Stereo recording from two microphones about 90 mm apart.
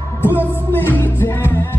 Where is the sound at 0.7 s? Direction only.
25° left (ahead or behind).